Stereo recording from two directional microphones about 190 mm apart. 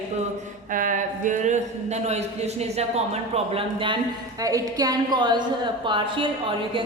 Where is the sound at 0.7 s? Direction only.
45° right (ahead or behind).